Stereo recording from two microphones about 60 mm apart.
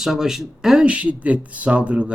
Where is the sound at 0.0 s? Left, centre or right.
Centre.